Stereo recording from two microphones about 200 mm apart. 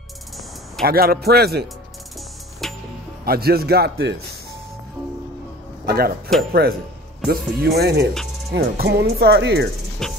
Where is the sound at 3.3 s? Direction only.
50° right (ahead or behind).